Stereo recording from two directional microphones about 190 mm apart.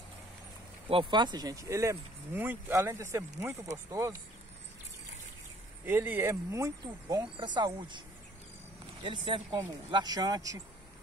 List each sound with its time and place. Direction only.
0.8 s speech: 25° right (ahead or behind)
5.9 s speech: 10° right (ahead or behind)
9.0 s speech: 25° right (ahead or behind)